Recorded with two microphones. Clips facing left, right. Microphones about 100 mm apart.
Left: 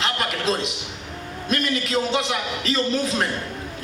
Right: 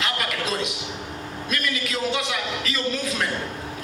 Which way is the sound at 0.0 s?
30° left (ahead or behind).